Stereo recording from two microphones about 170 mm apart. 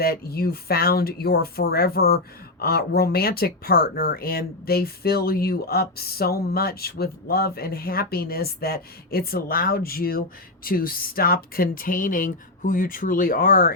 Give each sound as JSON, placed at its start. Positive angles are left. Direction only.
{"t": 0.0, "sound": "speech", "side_deg": 65}